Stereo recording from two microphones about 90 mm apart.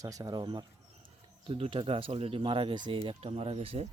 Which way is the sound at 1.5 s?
85° right.